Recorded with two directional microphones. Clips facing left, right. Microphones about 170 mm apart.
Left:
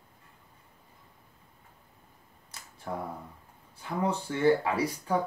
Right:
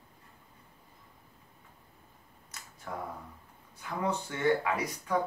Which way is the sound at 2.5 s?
30° left (ahead or behind).